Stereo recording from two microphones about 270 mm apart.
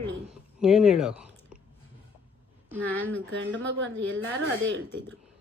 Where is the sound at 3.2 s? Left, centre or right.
Right.